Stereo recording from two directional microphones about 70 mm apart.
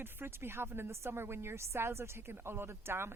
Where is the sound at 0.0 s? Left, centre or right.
Right.